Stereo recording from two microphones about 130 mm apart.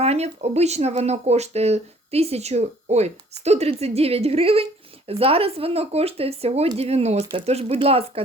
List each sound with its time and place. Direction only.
0.0 s speech: 55° right (ahead or behind)